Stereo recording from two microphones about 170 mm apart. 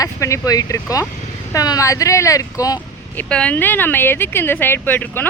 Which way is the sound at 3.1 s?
5° left (ahead or behind).